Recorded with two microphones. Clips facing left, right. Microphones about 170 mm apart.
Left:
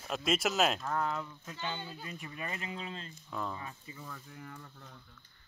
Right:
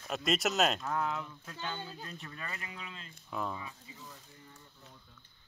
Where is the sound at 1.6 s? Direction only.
10° left (ahead or behind); by 3.1 s 35° left (ahead or behind).